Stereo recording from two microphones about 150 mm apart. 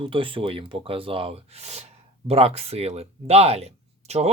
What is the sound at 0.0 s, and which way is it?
Speech, 35° right (ahead or behind).